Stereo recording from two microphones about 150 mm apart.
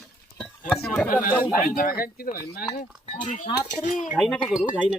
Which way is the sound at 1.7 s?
75° left (ahead or behind).